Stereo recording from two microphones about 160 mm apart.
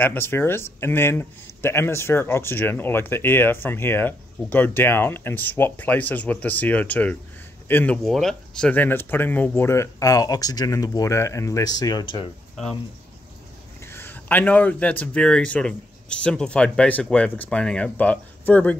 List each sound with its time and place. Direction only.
0.0 s speech: 15° left (ahead or behind); by 12.3 s 30° left (ahead or behind)
13.8 s speech: 15° left (ahead or behind)